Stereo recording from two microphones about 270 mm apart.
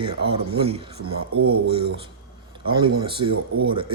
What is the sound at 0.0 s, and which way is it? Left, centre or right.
Speech, centre.